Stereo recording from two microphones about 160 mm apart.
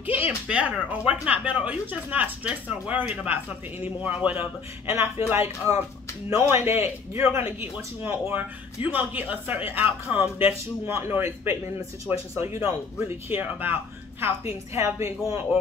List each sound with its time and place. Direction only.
0.0 s speech: 10° right (ahead or behind)